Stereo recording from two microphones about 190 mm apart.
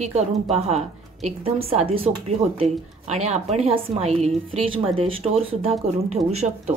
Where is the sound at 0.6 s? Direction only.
35° right (ahead or behind).